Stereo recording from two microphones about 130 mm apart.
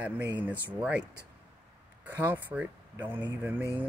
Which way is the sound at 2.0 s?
15° right (ahead or behind).